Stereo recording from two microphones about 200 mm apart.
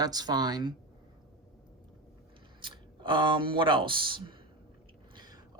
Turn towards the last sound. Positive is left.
turn(degrees=-20)  # may be behind; listen again after turning